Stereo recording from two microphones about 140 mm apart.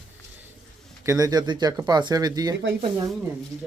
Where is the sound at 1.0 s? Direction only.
20° right (ahead or behind).